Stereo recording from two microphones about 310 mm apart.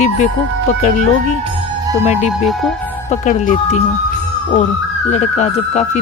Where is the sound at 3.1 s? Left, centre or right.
Left.